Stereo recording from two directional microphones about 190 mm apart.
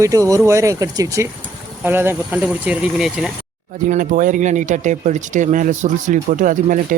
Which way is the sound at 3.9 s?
45° right (ahead or behind).